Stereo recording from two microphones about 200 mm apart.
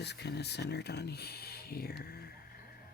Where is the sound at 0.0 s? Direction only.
55° left (ahead or behind).